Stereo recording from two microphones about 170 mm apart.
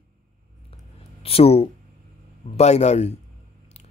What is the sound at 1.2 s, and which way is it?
Speech, 35° left (ahead or behind).